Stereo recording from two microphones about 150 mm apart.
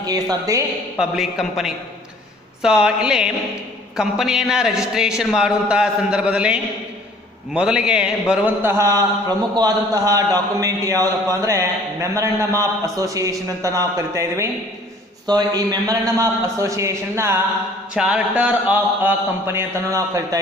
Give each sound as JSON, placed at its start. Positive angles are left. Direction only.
{"t": 0.0, "sound": "a man's voice", "side_deg": -25}
{"t": 0.9, "sound": "a man's voice", "side_deg": 0}
{"t": 17.9, "sound": "a sound", "side_deg": -5}